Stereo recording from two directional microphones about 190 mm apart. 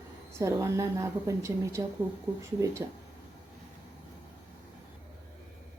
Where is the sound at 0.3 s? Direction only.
15° right (ahead or behind).